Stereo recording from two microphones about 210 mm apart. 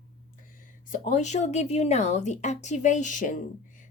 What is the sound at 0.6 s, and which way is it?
Speech, 40° left (ahead or behind).